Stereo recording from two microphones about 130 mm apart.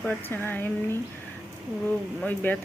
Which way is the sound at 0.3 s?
15° left (ahead or behind).